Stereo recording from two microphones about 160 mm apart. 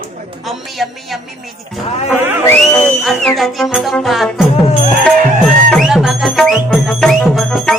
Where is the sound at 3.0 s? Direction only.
Centre (ahead or behind).